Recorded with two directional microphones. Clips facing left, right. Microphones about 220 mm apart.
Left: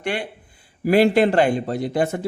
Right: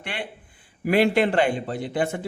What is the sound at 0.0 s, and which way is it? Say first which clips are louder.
A man's voice: left 7 dB; 45° left (ahead or behind).